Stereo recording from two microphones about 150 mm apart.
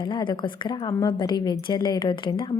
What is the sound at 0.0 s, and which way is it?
A woman's voice, 30° left (ahead or behind).